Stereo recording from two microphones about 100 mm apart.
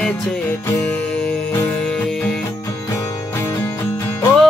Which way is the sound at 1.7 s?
10° left (ahead or behind).